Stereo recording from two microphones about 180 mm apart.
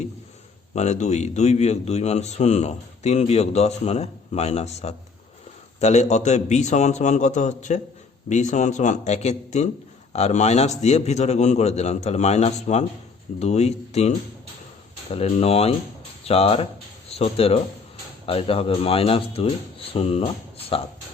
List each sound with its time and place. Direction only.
0.7 s a man's voice: 40° left (ahead or behind)
15.1 s a man's voice: 35° left (ahead or behind)